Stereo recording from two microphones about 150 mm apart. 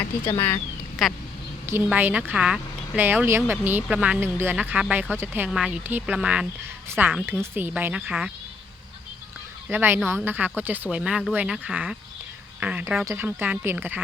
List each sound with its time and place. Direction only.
0.3 s speech: 20° left (ahead or behind)
1.0 s speech: centre (ahead or behind)
1.6 s a woman's voice: 15° right (ahead or behind)
9.6 s a woman's voice: 15° right (ahead or behind)